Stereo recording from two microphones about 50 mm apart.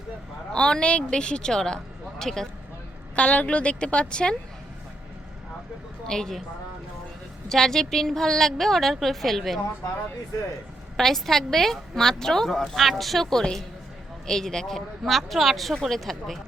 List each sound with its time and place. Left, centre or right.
0.5 s a woman's voice: centre
3.2 s a woman's voice: left
6.1 s a woman's voice: centre
7.4 s a woman's voice: centre
10.9 s a woman's voice: centre